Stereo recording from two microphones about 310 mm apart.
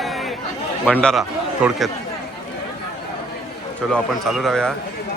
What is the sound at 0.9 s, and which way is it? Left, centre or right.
Speech, centre.